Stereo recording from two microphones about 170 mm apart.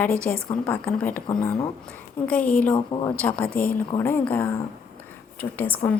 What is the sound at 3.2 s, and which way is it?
A woman's voice, 5° left (ahead or behind).